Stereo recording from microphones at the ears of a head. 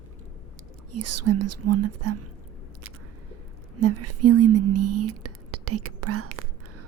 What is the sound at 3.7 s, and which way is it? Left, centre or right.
Speech, right.